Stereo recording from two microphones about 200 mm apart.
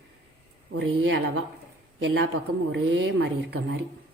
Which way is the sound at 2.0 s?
60° right (ahead or behind).